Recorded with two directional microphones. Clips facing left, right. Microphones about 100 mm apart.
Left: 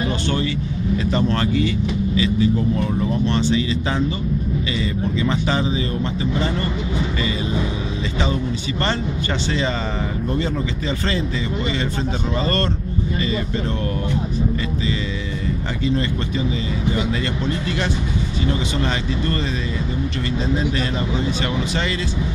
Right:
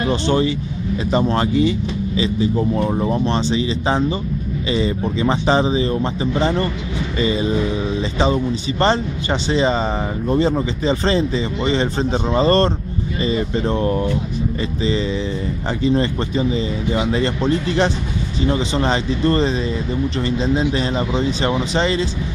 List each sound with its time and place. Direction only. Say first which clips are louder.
0.1 s speech: right 5 dB; 25° right (ahead or behind)